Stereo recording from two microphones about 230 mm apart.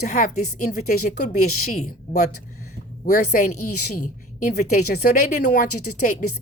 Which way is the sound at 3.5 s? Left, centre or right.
Left.